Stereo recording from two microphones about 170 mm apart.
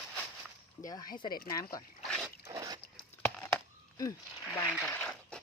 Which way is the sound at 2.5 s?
20° right (ahead or behind).